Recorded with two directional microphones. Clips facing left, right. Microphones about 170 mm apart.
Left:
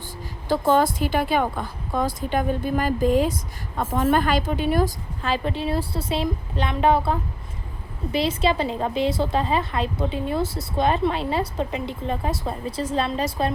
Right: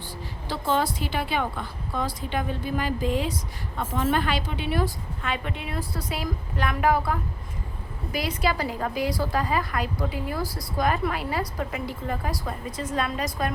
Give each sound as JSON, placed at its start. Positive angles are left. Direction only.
{"t": 0.4, "sound": "a woman's voice", "side_deg": 50}